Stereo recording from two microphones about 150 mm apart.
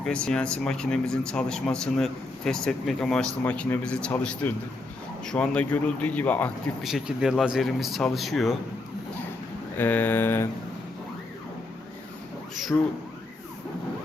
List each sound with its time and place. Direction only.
0.0 s a man's voice: 5° left (ahead or behind)
6.8 s speech: centre (ahead or behind)
9.7 s a man's voice: 15° left (ahead or behind)
12.7 s a man's voice: 10° left (ahead or behind)